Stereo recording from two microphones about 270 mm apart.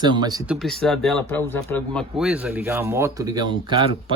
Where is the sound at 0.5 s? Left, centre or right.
Centre.